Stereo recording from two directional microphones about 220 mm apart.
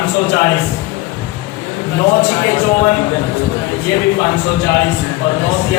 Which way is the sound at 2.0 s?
25° left (ahead or behind).